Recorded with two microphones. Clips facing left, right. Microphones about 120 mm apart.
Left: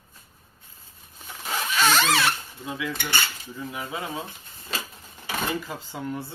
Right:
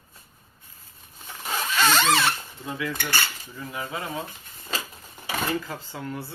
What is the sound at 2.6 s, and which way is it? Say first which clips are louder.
Cutlery: right 1 dB; 15° left (ahead or behind).